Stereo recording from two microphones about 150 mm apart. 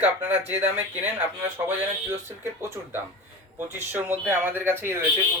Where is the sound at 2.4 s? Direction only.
15° right (ahead or behind).